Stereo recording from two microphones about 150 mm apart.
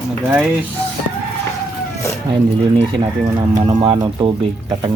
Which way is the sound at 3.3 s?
25° right (ahead or behind).